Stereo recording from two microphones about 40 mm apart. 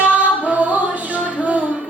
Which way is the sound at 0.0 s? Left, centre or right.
Right.